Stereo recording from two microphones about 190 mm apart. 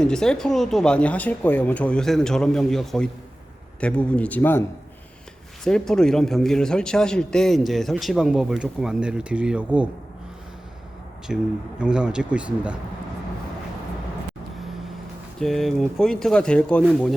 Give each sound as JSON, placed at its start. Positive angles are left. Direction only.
{"t": 0.0, "sound": "a man's voice", "side_deg": 5}
{"t": 5.6, "sound": "a man's voice", "side_deg": 5}
{"t": 11.3, "sound": "a man's voice", "side_deg": -5}
{"t": 15.4, "sound": "a man's voice", "side_deg": 0}